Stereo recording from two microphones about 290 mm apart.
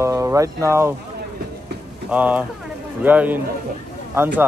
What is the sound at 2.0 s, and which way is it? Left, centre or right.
A man's voice, centre.